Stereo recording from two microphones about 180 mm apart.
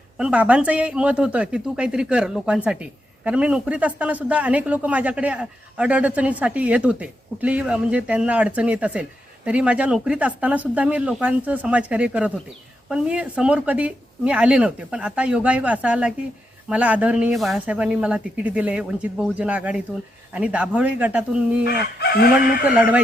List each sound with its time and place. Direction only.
0.2 s a woman's voice: 5° right (ahead or behind)
21.9 s chicken: 65° left (ahead or behind)
22.7 s speech: 10° right (ahead or behind)